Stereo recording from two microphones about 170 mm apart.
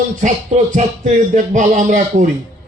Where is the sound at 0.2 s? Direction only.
45° right (ahead or behind).